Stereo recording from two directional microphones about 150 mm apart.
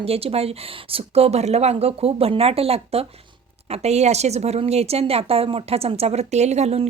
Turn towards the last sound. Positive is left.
turn(degrees=-45)  # may be behind; listen again after turning